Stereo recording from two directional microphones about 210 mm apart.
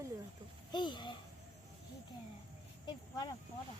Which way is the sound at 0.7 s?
20° left (ahead or behind).